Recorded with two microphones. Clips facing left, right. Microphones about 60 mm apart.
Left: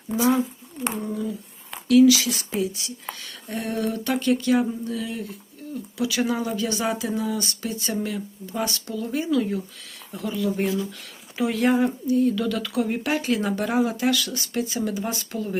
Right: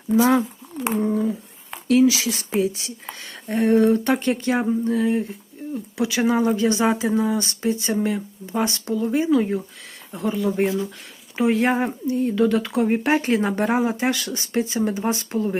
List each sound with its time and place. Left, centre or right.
0.9 s speech: right